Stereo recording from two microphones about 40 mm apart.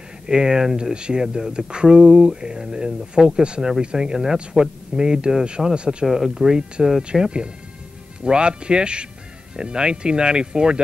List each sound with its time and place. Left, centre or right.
0.3 s speech: centre
6.0 s speech: centre